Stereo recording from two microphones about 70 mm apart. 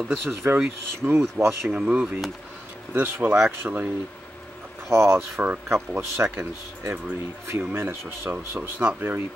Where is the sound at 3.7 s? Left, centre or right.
Right.